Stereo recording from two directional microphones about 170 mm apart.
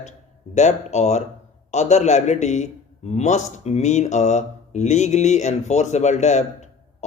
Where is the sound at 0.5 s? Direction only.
45° left (ahead or behind).